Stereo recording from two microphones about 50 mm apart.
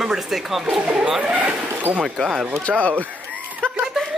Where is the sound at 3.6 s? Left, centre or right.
Left.